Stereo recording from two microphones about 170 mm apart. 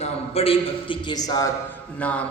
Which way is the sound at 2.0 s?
10° left (ahead or behind).